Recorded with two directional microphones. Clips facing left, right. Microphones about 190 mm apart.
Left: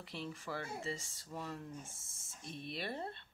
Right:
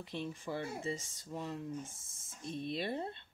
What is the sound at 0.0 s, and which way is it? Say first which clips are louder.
Speech: right 4 dB; 20° right (ahead or behind).